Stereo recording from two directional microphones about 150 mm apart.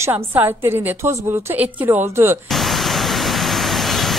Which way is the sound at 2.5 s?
Centre (ahead or behind).